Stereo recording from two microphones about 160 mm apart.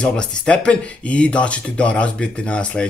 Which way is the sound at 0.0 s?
5° left (ahead or behind).